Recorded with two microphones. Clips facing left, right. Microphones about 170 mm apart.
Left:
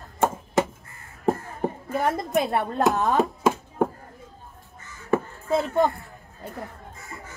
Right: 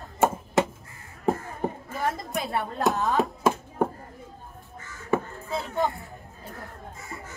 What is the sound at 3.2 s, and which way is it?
Chopping, centre (ahead or behind).